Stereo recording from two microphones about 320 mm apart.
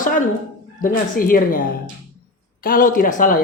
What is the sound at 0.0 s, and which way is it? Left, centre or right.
Speech, left.